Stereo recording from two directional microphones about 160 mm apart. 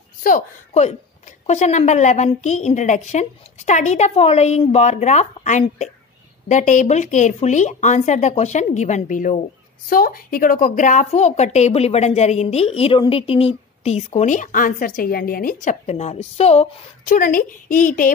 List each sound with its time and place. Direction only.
1.4 s a woman's voice: 45° left (ahead or behind)